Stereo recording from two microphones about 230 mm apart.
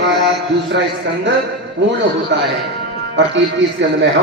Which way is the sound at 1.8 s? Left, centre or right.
Right.